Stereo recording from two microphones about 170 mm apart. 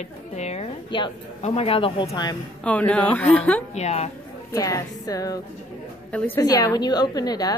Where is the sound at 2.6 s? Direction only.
5° left (ahead or behind).